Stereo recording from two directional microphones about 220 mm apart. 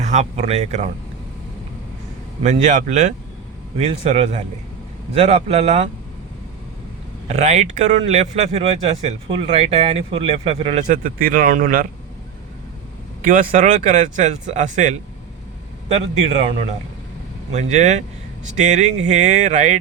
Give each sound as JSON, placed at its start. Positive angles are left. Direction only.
{"t": 0.0, "sound": "speech", "side_deg": -30}
{"t": 2.4, "sound": "speech", "side_deg": -30}
{"t": 7.3, "sound": "speech", "side_deg": -30}
{"t": 13.2, "sound": "speech", "side_deg": -40}